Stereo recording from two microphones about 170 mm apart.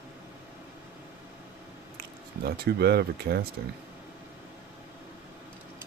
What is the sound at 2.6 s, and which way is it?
Speech, 70° right (ahead or behind).